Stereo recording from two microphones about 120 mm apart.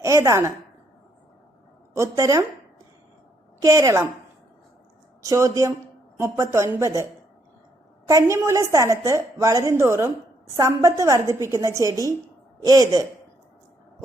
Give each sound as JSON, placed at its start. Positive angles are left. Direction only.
{"t": 0.0, "sound": "a woman's voice", "side_deg": -25}
{"t": 2.0, "sound": "a woman's voice", "side_deg": -25}
{"t": 3.6, "sound": "a woman's voice", "side_deg": -25}
{"t": 5.2, "sound": "a woman's voice", "side_deg": -25}